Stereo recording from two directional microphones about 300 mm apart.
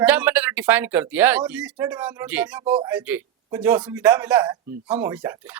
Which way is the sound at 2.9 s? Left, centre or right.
Centre.